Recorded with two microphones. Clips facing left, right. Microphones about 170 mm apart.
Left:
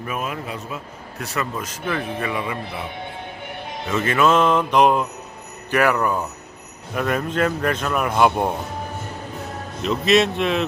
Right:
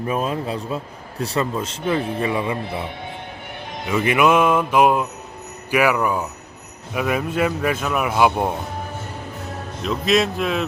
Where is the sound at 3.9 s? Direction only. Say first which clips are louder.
Right 1 dB; 15° right (ahead or behind).